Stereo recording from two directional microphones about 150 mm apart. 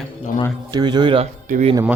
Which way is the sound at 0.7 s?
30° right (ahead or behind).